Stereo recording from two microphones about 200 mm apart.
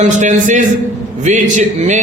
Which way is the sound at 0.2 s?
40° right (ahead or behind).